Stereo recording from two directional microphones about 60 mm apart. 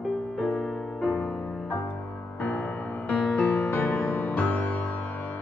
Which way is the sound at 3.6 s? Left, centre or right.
Left.